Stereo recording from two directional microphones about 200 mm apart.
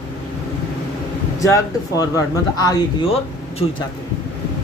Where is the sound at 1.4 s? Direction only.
15° left (ahead or behind).